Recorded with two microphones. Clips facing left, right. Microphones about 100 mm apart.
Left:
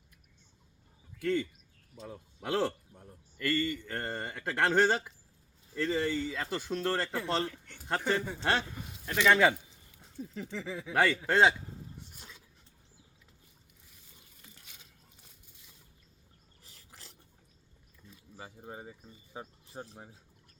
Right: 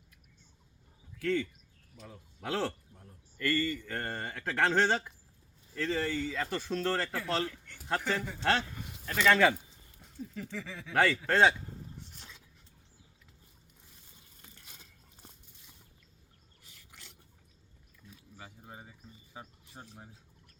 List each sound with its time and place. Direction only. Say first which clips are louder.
1.2 s speech: even; 20° left (ahead or behind)
2.9 s speech: left 3 dB; 30° left (ahead or behind)
3.4 s speech: even; 15° left (ahead or behind)
7.2 s a sound: left 1 dB; 20° left (ahead or behind)
7.9 s speech: left 2 dB; 15° left (ahead or behind)
10.3 s a sound: left 4 dB; 25° left (ahead or behind)
10.9 s speech: even; 10° left (ahead or behind)
12.1 s a sound: even; 5° left (ahead or behind)
16.6 s filing: left 1 dB; 35° left (ahead or behind)
18.3 s bird: left 5 dB; 25° left (ahead or behind)